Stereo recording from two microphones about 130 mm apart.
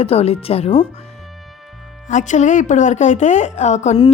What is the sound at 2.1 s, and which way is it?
A woman's voice, 70° left (ahead or behind).